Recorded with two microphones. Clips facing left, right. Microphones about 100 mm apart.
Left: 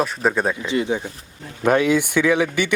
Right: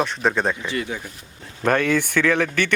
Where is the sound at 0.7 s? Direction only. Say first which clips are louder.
Left 6 dB; 20° left (ahead or behind).